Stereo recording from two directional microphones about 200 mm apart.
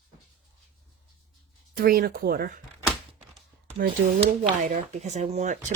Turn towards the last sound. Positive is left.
turn(degrees=-40)  # may be behind; listen again after turning